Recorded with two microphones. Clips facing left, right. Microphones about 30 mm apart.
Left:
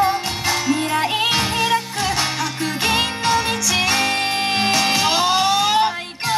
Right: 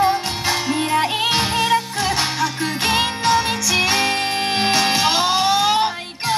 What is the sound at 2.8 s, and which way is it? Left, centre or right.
Music, centre.